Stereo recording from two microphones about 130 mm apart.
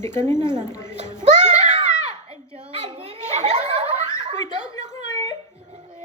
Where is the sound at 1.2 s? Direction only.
60° right (ahead or behind).